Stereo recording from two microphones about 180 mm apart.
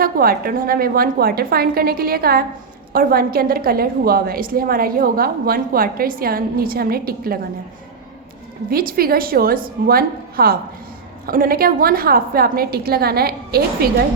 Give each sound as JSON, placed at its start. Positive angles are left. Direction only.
{"t": 0.0, "sound": "a woman's voice", "side_deg": -55}
{"t": 8.7, "sound": "a woman's voice", "side_deg": -55}